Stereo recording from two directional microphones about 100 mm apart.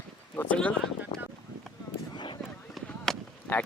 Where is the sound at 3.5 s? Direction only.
20° left (ahead or behind).